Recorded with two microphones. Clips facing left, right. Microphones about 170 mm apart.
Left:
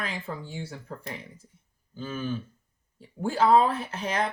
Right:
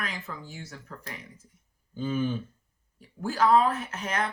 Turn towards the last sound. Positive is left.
turn(degrees=30)  # may be behind; listen again after turning